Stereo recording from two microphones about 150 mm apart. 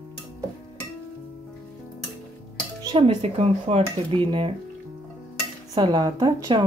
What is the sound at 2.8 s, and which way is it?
Music, 30° right (ahead or behind).